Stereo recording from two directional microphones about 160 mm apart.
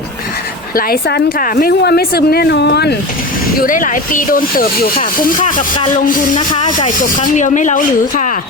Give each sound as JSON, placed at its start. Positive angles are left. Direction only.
{"t": 0.8, "sound": "a woman's voice", "side_deg": 80}
{"t": 3.6, "sound": "speech", "side_deg": 55}
{"t": 6.3, "sound": "speech", "side_deg": 30}
{"t": 6.7, "sound": "speech", "side_deg": 55}